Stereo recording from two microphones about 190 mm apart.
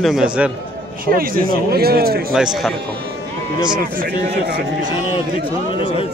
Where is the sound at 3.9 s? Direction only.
50° right (ahead or behind).